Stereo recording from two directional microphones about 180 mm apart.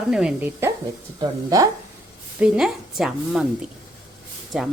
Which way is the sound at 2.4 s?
5° right (ahead or behind).